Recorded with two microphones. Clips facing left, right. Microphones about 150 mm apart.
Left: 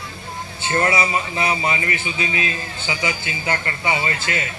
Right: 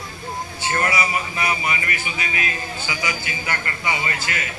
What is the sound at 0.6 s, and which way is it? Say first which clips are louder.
A man's voice: left 3 dB; 25° left (ahead or behind).